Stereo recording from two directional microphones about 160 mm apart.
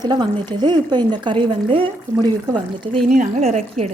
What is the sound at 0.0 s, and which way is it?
Speech, 25° right (ahead or behind).